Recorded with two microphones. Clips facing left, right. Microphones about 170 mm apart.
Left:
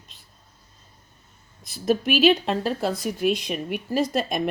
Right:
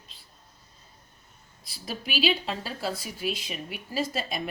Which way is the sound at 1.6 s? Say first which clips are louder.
Left 15 dB; 45° left (ahead or behind).